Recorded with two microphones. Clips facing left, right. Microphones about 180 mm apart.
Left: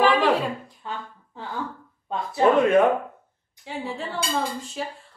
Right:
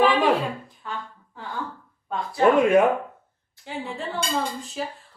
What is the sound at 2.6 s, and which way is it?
A man's voice, 10° right (ahead or behind).